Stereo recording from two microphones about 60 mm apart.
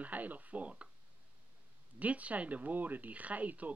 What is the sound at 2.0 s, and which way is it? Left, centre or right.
Speech, right.